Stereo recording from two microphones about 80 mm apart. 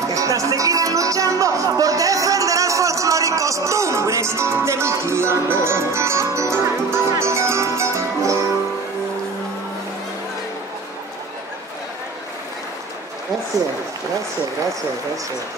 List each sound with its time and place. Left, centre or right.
0.1 s music: right